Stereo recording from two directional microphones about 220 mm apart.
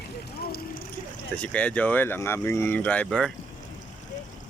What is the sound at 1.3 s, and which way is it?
Speech, 5° left (ahead or behind).